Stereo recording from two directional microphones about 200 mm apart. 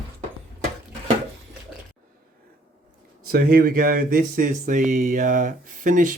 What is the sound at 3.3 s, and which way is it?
Speech, 45° right (ahead or behind).